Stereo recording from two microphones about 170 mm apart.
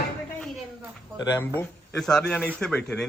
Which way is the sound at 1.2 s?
20° left (ahead or behind).